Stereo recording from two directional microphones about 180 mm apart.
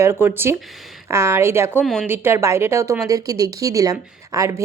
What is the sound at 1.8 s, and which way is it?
Speech, centre (ahead or behind).